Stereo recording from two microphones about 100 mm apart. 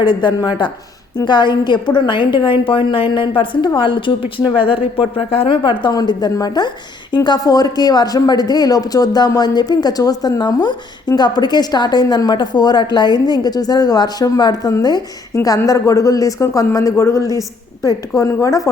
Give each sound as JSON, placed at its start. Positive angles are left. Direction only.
{"t": 0.0, "sound": "a woman's voice", "side_deg": 45}